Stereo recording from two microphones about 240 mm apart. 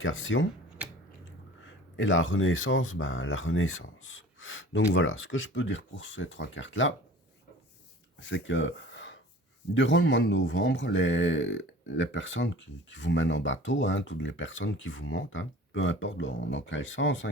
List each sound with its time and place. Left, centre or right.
0.0 s speech: left
0.8 s a sound: centre
1.6 s speech: left
8.2 s speech: left